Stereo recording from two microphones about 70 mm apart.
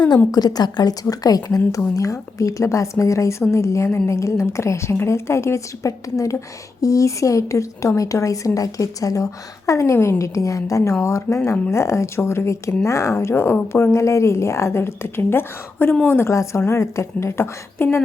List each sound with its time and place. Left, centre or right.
0.3 s a woman's voice: left
16.3 s a woman's voice: left